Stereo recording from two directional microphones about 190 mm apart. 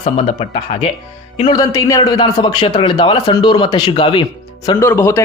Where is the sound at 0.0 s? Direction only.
30° left (ahead or behind).